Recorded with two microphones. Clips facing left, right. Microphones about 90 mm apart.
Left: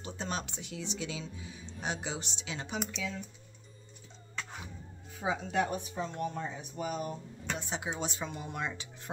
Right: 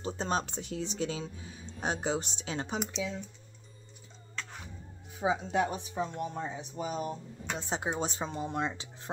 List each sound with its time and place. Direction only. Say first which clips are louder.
0.0 s speech: right 6 dB; 35° right (ahead or behind)
2.9 s speech: right 3 dB; 25° right (ahead or behind)
5.1 s speech: right 2 dB; 20° right (ahead or behind)